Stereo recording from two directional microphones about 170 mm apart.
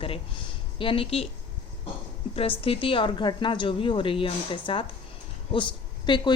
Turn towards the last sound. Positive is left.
turn(degrees=25)  # may be behind; listen again after turning